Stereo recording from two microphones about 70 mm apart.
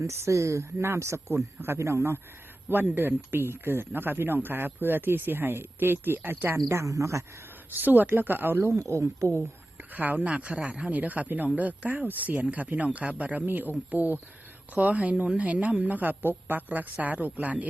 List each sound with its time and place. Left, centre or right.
0.0 s speech: right
2.6 s speech: right
6.7 s speech: right
7.7 s speech: right
9.7 s speech: right